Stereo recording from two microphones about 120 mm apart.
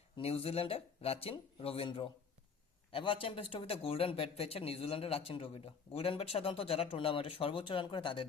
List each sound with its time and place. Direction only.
0.2 s speech: 55° left (ahead or behind)